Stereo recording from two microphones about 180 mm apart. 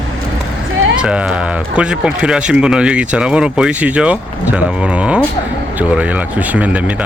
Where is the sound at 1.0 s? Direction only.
5° right (ahead or behind).